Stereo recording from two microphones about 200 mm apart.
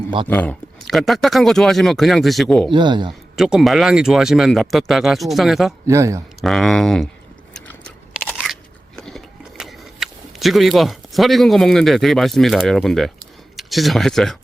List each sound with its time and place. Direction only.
0.3 s speech: 10° left (ahead or behind)
2.6 s speech: 25° right (ahead or behind)
3.1 s speech: centre (ahead or behind)
5.9 s speech: 15° right (ahead or behind)
6.4 s speech: centre (ahead or behind)
7.5 s crunch: 5° left (ahead or behind)
9.0 s a sound: centre (ahead or behind)